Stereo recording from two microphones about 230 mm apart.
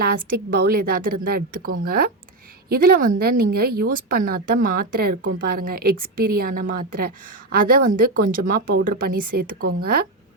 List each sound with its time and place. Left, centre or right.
0.0 s speech: right